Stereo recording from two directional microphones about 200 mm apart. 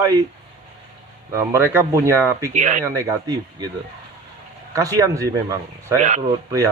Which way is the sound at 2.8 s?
15° right (ahead or behind).